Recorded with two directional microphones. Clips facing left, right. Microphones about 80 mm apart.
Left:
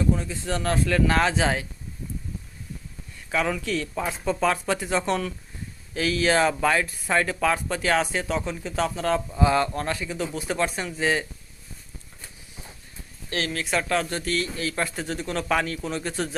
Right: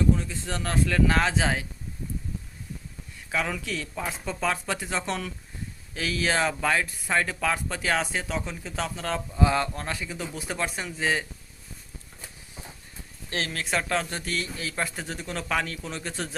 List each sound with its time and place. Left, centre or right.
0.3 s speech: centre
3.3 s speech: centre
13.5 s a man's voice: right; by 16.3 s centre